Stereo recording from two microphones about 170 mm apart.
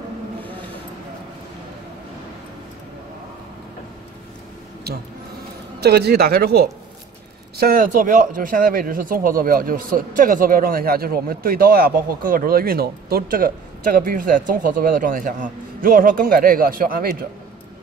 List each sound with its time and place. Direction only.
5.8 s a man's voice: 75° right (ahead or behind)